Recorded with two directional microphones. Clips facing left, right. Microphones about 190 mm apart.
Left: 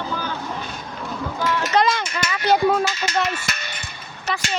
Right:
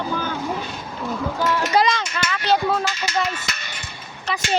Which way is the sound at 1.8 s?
10° left (ahead or behind).